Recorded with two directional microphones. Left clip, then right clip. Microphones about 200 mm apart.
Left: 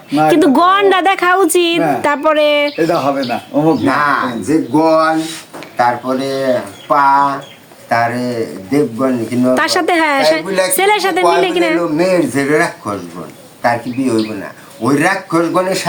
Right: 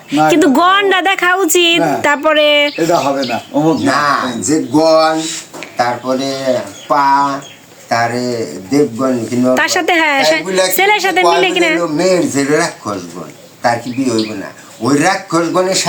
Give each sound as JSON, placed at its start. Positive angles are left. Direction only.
{"t": 0.1, "sound": "a man's voice", "side_deg": 5}
{"t": 2.7, "sound": "speech", "side_deg": 20}
{"t": 3.8, "sound": "speech", "side_deg": -45}
{"t": 4.7, "sound": "speech", "side_deg": -25}
{"t": 4.9, "sound": "speech", "side_deg": -10}
{"t": 5.7, "sound": "a man's voice", "side_deg": 5}